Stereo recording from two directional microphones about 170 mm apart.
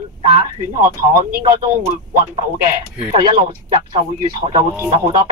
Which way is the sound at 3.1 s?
35° right (ahead or behind).